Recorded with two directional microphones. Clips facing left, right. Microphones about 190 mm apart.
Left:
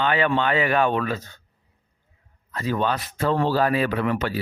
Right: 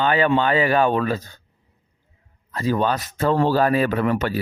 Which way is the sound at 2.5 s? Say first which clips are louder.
Right 3 dB; 35° right (ahead or behind).